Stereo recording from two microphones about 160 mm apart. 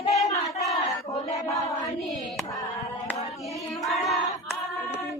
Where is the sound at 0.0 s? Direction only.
45° left (ahead or behind).